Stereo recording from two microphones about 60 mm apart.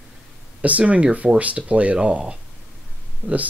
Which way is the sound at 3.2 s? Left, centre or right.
Left.